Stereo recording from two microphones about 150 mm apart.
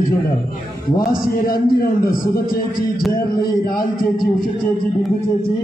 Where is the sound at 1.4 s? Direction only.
80° left.